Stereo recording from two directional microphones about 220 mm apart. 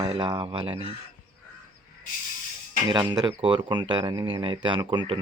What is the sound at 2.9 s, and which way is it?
Speech, 20° right (ahead or behind).